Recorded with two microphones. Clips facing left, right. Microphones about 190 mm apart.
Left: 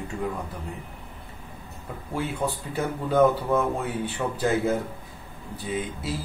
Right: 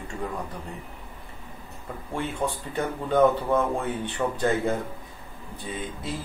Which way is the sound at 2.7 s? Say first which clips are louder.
Even; 5° left (ahead or behind).